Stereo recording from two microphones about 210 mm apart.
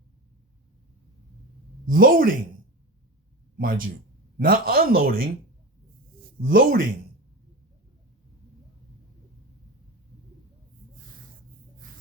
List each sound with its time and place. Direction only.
1.9 s speech: 45° right (ahead or behind)
3.6 s speech: 40° right (ahead or behind)
6.4 s speech: 45° right (ahead or behind)